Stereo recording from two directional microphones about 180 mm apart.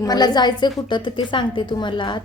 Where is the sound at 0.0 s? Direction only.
20° left (ahead or behind).